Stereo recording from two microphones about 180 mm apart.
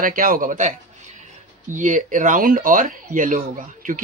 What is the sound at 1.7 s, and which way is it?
Speech, 45° right (ahead or behind).